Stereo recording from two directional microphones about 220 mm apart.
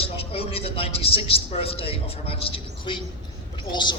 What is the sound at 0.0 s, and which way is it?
A man's voice, 25° left (ahead or behind).